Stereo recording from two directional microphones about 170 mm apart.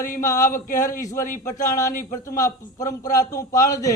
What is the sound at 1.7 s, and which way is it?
A man's voice, 20° left (ahead or behind).